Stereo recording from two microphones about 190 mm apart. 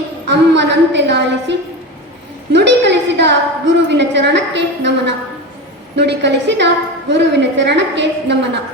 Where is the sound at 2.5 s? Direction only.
65° right (ahead or behind).